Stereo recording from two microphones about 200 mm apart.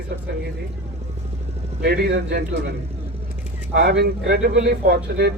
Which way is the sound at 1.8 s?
50° right (ahead or behind).